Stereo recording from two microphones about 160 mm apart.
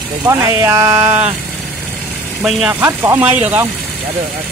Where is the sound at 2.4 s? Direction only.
5° right (ahead or behind).